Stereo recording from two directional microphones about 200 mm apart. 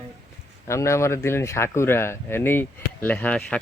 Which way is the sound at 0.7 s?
15° left (ahead or behind).